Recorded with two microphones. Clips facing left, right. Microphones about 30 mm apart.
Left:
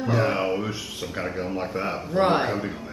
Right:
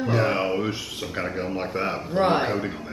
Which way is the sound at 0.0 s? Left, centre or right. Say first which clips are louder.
Right 1 dB; centre.